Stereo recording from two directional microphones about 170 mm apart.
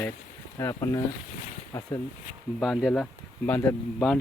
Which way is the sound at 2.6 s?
Centre (ahead or behind).